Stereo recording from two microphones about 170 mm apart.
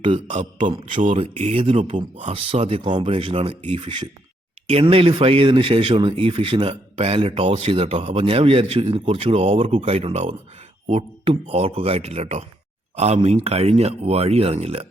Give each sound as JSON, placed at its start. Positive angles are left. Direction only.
{"t": 0.0, "sound": "speech", "side_deg": -35}